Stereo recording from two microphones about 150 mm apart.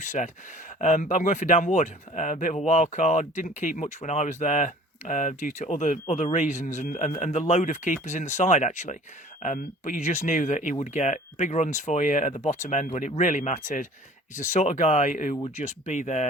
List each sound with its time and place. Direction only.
0.0 s speech: 55° left (ahead or behind)